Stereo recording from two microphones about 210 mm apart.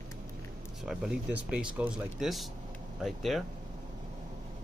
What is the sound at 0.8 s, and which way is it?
Speech, 5° right (ahead or behind).